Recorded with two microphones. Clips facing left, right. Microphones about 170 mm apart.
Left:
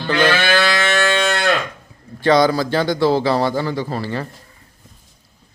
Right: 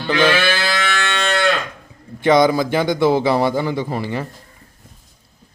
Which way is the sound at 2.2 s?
20° right (ahead or behind).